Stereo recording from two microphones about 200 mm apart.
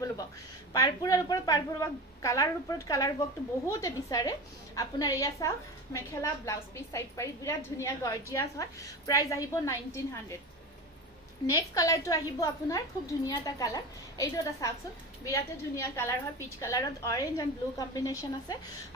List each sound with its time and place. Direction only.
0.7 s a woman's voice: 15° left (ahead or behind)
11.4 s a woman's voice: 15° left (ahead or behind)